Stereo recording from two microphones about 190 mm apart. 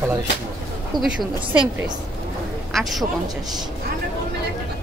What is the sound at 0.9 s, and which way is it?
Speech, 20° right (ahead or behind).